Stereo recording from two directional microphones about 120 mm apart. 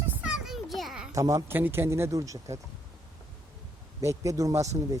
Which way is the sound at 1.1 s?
25° right (ahead or behind).